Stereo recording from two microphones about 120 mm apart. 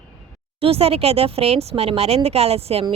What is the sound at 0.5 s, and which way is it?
Speech, 55° right (ahead or behind).